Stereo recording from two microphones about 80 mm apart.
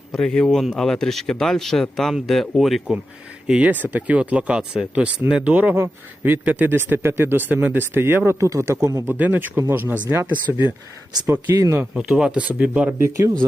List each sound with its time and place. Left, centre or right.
0.1 s speech: centre
3.4 s speech: centre
5.7 s speech: right
9.0 s speech: right
11.9 s speech: centre
13.0 s speech: right